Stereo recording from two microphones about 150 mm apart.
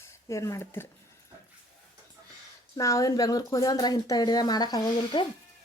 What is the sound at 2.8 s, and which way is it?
A woman's voice, 20° left (ahead or behind).